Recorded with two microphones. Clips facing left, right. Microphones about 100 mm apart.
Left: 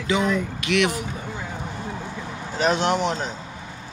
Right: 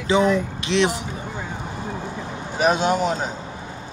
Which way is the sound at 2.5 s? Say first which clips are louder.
Right 2 dB; 10° right (ahead or behind).